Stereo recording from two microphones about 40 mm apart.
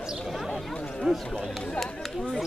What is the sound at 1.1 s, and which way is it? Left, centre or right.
Speech, right.